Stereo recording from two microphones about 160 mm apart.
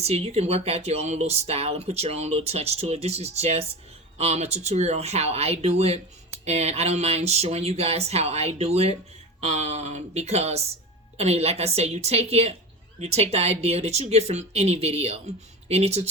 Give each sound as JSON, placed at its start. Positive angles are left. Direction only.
{"t": 0.0, "sound": "speech", "side_deg": -40}